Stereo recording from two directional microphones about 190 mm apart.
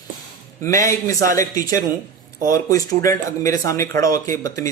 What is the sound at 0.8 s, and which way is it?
Speech, 15° left (ahead or behind).